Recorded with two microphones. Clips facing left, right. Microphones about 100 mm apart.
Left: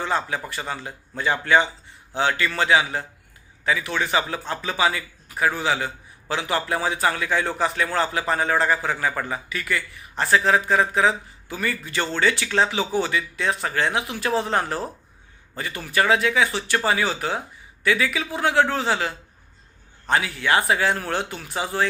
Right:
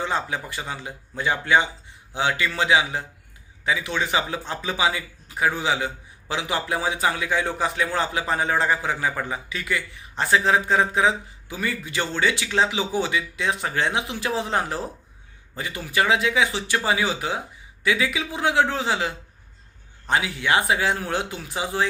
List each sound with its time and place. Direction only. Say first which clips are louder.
0.0 s a man's voice: left 1 dB; 20° right (ahead or behind)